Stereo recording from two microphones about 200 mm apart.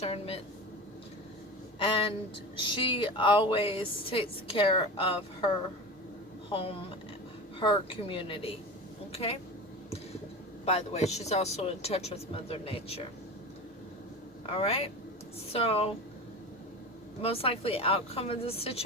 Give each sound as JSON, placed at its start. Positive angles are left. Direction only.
{"t": 0.0, "sound": "speech", "side_deg": 30}
{"t": 1.8, "sound": "a woman's voice", "side_deg": 25}
{"t": 6.5, "sound": "a woman's voice", "side_deg": 30}
{"t": 10.7, "sound": "speech", "side_deg": 35}
{"t": 14.5, "sound": "a woman's voice", "side_deg": 30}
{"t": 17.2, "sound": "a woman's voice", "side_deg": 30}